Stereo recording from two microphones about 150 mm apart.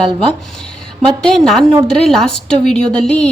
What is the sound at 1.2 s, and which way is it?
A woman's voice, 5° left (ahead or behind).